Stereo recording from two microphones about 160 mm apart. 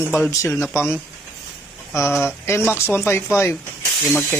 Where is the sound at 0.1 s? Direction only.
15° left (ahead or behind).